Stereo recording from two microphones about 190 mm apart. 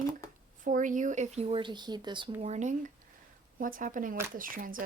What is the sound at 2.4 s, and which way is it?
Speech, 35° right (ahead or behind).